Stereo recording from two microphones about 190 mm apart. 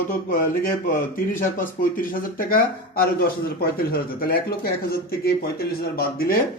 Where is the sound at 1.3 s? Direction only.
45° left (ahead or behind).